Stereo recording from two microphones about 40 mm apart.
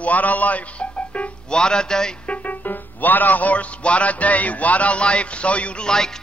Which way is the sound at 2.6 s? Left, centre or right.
Left.